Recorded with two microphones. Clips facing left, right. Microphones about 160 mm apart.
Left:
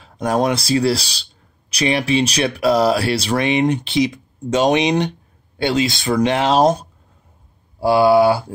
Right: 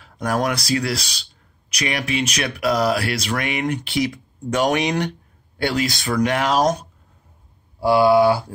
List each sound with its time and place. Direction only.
0.0 s speech: 25° left (ahead or behind)